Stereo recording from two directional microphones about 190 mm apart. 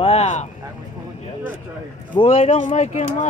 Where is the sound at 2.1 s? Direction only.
35° left (ahead or behind).